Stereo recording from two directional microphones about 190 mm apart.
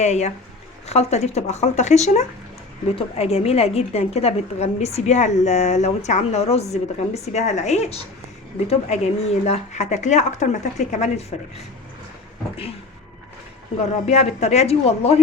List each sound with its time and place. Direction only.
0.0 s a woman's voice: 35° left (ahead or behind)
14.1 s a woman's voice: 35° left (ahead or behind)